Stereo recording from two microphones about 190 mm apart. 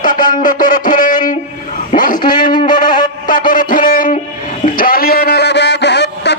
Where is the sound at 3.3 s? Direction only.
45° left (ahead or behind); by 6.3 s 65° left (ahead or behind).